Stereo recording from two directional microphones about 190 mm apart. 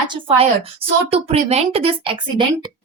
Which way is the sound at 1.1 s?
35° right (ahead or behind).